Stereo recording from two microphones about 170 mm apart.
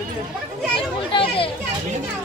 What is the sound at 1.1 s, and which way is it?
Children playing, 30° left (ahead or behind).